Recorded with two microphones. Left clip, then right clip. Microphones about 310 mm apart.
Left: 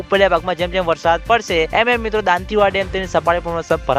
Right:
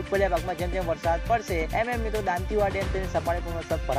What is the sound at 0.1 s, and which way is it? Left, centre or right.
Speech, left.